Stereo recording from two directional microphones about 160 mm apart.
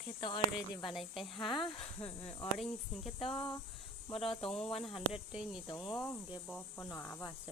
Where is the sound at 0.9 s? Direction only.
Centre (ahead or behind).